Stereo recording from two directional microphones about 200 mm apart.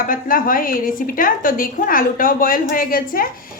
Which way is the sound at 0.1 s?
45° left (ahead or behind).